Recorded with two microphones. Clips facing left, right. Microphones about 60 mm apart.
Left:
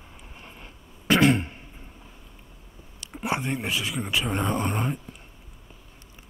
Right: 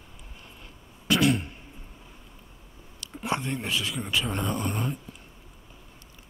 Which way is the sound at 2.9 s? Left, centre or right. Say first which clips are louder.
Left 1 dB; left.